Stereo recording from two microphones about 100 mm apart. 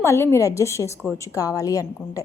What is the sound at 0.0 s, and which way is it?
A woman's voice, 25° left (ahead or behind).